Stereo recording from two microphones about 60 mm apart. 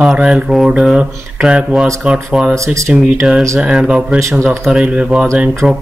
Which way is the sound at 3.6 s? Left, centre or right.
Centre.